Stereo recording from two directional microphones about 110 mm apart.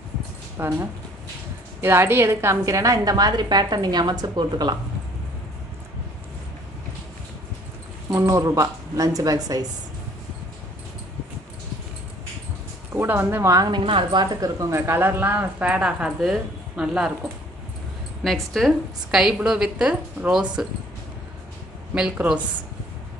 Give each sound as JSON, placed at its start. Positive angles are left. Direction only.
{"t": 0.6, "sound": "a woman's voice", "side_deg": -20}
{"t": 8.1, "sound": "a woman's voice", "side_deg": -25}
{"t": 12.9, "sound": "speech", "side_deg": -20}
{"t": 13.7, "sound": "a woman's voice", "side_deg": -50}
{"t": 14.6, "sound": "a woman's voice", "side_deg": -25}
{"t": 18.2, "sound": "a woman's voice", "side_deg": 0}
{"t": 21.9, "sound": "speech", "side_deg": -10}